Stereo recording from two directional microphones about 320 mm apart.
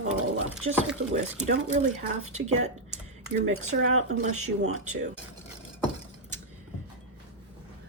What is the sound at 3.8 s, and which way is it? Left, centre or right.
Speech, right.